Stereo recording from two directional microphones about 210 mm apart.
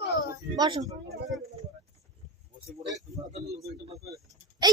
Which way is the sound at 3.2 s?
15° right (ahead or behind).